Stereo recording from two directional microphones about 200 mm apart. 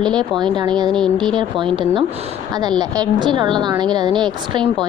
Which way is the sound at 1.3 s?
25° right (ahead or behind).